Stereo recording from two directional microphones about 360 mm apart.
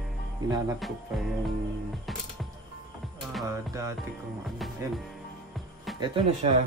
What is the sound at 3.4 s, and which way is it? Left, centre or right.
Music, centre.